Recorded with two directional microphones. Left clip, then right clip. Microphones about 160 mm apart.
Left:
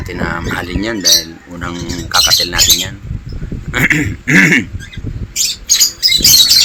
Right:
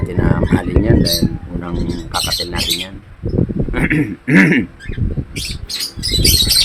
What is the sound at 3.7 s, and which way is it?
Speech, 5° right (ahead or behind).